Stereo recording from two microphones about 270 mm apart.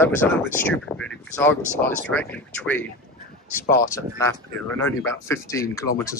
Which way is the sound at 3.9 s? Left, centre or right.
Centre.